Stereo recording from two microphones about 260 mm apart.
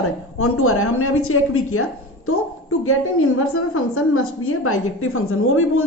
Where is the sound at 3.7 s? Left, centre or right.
Left.